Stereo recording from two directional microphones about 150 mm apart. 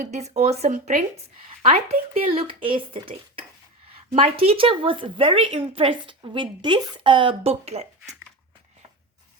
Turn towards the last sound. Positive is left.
turn(degrees=-45)  # may be behind; listen again after turning